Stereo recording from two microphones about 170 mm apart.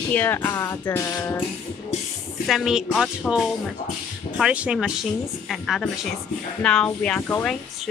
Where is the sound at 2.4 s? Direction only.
Centre (ahead or behind).